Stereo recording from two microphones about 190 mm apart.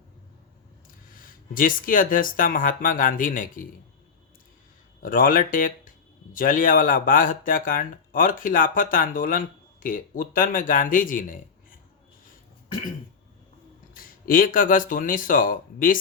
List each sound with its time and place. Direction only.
1.1 s speech: 50° left (ahead or behind)
5.0 s speech: 45° left (ahead or behind)
13.9 s speech: 50° left (ahead or behind)